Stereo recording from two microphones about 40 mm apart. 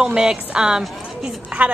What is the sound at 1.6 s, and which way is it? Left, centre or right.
Speech, right.